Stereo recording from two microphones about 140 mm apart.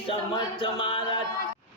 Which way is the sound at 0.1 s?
40° left (ahead or behind).